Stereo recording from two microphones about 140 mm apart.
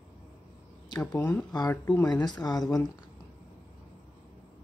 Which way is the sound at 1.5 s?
25° left (ahead or behind).